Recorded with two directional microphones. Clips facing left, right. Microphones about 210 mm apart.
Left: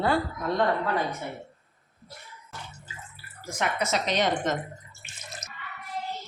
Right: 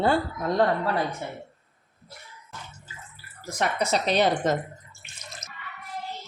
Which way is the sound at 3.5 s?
35° right (ahead or behind).